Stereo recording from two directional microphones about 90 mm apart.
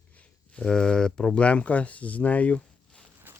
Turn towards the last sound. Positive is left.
turn(degrees=-25)  # may be behind; listen again after turning